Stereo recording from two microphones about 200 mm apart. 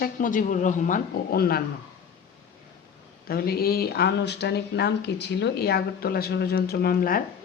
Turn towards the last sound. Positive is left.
turn(degrees=45)  # may be behind; listen again after turning